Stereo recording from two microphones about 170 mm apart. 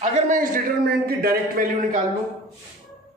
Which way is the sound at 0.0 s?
50° right (ahead or behind).